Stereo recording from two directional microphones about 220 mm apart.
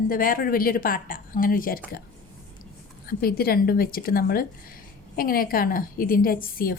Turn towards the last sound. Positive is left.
turn(degrees=40)  # may be behind; listen again after turning